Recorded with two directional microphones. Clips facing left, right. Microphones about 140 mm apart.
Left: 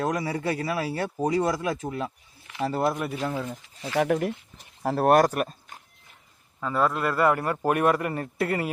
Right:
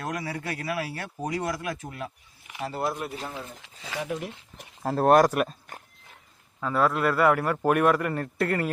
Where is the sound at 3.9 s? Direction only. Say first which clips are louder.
Left 8 dB; 75° left (ahead or behind).